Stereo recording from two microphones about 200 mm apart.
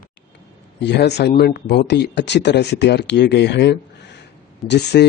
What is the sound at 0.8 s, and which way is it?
Speech, 60° left (ahead or behind).